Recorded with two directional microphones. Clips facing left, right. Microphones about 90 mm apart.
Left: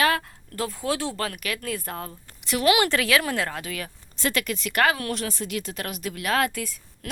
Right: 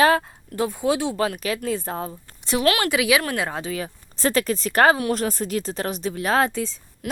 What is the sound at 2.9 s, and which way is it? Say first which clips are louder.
A woman's voice: right 2 dB; 10° right (ahead or behind).